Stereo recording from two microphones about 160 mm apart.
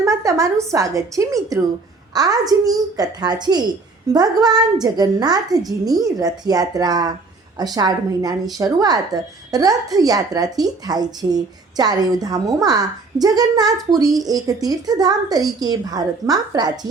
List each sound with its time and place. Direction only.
0.0 s a woman's voice: 20° right (ahead or behind)